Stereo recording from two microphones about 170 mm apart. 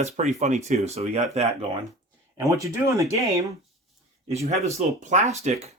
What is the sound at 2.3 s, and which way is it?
Speech, 20° right (ahead or behind).